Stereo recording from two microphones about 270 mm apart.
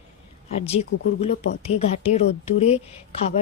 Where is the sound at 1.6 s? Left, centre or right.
Left.